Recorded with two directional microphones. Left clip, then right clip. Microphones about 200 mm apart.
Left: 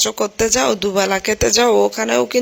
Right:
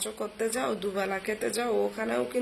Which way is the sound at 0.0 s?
45° left (ahead or behind).